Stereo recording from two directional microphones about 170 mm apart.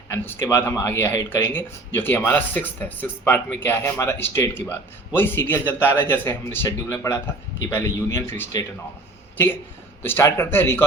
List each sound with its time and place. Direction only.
0.1 s speech: 20° left (ahead or behind)
10.0 s speech: 15° left (ahead or behind)